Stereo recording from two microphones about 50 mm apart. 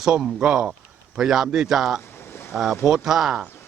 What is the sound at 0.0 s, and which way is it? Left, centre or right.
Speech, centre.